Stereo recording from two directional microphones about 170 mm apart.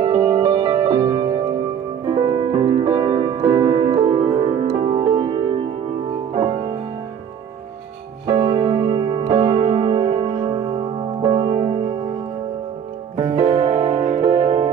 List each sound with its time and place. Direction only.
0.4 s music: 25° right (ahead or behind)
2.5 s music: 35° right (ahead or behind)
2.8 s music: 25° right (ahead or behind)
8.3 s music: 20° right (ahead or behind)
13.2 s music: 45° right (ahead or behind)
13.7 s music: 35° right (ahead or behind)